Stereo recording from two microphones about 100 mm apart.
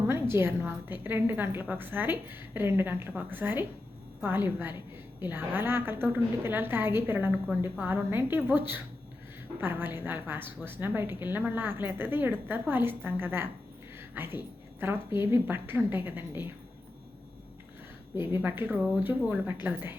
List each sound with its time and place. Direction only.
0.1 s a woman's voice: 25° right (ahead or behind)
18.2 s a woman's voice: 20° right (ahead or behind)